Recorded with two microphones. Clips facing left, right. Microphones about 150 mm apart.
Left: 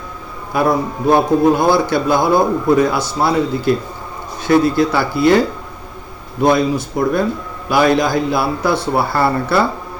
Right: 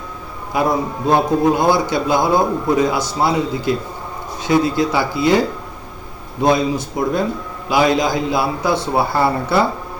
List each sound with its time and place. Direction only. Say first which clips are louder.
0.5 s a man's voice: left 2 dB; 15° right (ahead or behind)
6.4 s a man's voice: left 2 dB; 20° right (ahead or behind)